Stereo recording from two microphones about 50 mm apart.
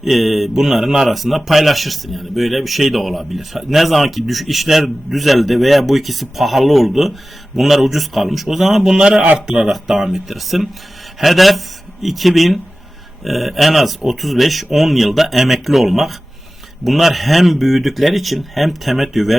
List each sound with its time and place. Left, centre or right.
0.0 s speech: centre